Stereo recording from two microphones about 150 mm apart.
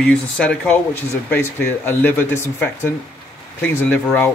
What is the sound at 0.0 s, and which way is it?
Speech, 10° left (ahead or behind).